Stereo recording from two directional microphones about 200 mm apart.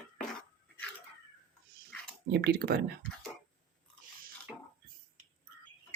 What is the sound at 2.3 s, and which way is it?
Speech, 55° right (ahead or behind).